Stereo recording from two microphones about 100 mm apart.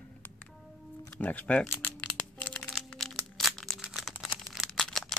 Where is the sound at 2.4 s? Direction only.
10° left (ahead or behind).